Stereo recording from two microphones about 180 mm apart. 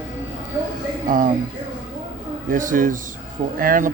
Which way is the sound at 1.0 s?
50° right (ahead or behind).